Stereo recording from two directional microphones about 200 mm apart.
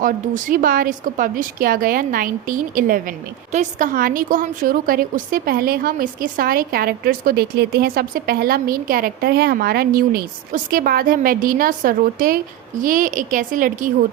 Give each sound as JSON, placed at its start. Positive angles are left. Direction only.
{"t": 0.0, "sound": "a woman's voice", "side_deg": -40}